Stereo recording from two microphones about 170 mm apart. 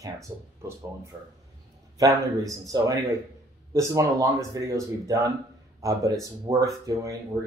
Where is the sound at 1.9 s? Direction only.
20° right (ahead or behind).